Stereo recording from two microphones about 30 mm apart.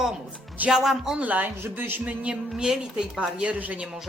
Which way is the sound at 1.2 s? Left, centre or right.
Right.